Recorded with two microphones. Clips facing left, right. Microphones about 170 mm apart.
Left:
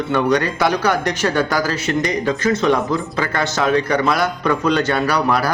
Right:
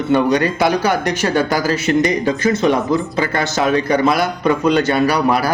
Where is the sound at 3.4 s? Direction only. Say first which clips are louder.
Even; 15° right (ahead or behind).